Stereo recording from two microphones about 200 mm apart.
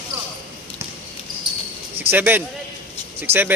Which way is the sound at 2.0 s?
10° right (ahead or behind).